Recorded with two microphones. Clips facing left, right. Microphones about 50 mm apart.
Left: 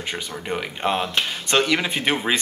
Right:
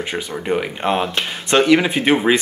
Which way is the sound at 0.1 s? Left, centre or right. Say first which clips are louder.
Right 6 dB; centre.